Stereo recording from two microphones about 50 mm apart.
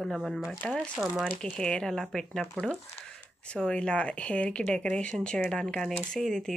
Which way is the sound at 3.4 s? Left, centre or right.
Left.